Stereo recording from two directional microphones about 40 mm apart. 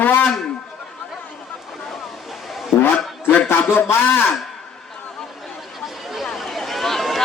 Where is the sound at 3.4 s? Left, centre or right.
Left.